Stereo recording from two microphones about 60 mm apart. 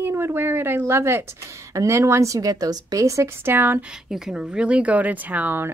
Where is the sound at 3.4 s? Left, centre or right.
Right.